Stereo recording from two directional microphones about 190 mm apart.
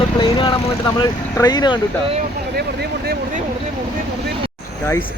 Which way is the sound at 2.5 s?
55° right (ahead or behind).